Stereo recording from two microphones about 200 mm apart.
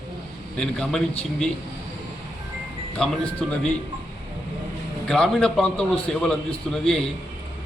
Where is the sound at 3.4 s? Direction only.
Centre (ahead or behind).